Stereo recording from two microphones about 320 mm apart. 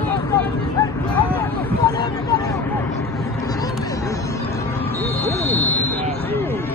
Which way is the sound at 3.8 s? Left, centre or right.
Centre.